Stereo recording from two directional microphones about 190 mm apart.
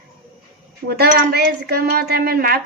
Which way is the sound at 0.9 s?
55° right (ahead or behind).